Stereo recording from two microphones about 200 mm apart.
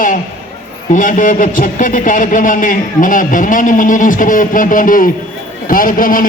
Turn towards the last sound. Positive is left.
turn(degrees=45)  # may be behind; listen again after turning